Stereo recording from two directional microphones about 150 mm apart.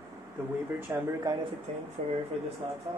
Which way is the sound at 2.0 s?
50° right (ahead or behind).